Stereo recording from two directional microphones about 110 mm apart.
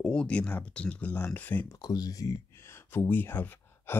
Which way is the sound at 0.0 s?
10° left (ahead or behind).